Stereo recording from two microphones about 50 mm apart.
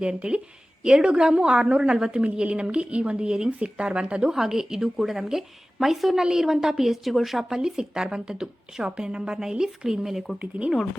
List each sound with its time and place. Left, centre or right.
0.0 s a woman's voice: centre
10.3 s a woman's voice: right